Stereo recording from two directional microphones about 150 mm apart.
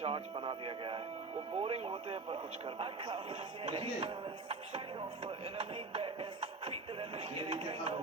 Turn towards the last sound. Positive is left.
turn(degrees=-40)  # may be behind; listen again after turning